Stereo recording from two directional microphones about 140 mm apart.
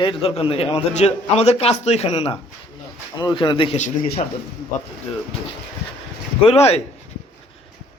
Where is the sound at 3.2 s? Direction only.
30° left (ahead or behind).